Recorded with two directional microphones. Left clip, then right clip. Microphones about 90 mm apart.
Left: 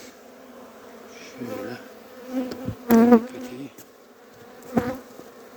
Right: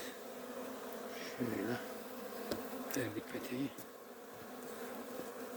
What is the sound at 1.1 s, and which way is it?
Bee, 25° left (ahead or behind).